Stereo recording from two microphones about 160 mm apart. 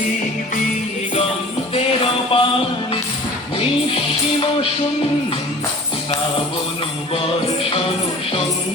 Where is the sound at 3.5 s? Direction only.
35° left (ahead or behind).